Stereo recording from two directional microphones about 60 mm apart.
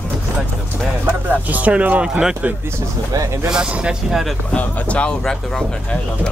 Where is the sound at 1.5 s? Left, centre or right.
Right.